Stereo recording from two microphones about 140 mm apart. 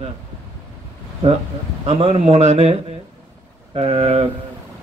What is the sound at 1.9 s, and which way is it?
A man's voice, 45° right (ahead or behind).